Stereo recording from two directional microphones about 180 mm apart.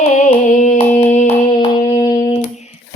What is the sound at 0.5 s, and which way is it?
Hands, 40° left (ahead or behind).